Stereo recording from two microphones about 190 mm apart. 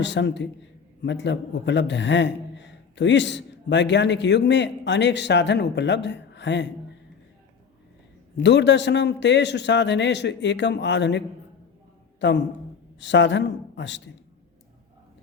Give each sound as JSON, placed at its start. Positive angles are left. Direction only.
{"t": 0.0, "sound": "a man's voice", "side_deg": 70}
{"t": 8.4, "sound": "a man's voice", "side_deg": 65}
{"t": 12.2, "sound": "a man's voice", "side_deg": 70}